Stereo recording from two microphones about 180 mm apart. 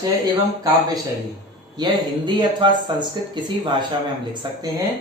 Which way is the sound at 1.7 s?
25° right (ahead or behind).